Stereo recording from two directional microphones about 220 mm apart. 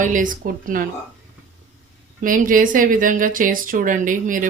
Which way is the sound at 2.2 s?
40° right (ahead or behind).